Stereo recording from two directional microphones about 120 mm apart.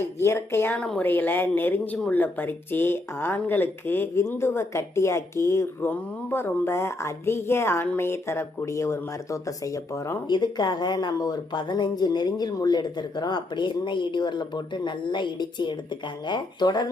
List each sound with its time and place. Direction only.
0.2 s a woman's voice: 20° left (ahead or behind)